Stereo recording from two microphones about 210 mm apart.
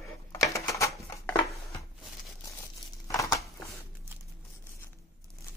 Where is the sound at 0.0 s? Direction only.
15° left (ahead or behind).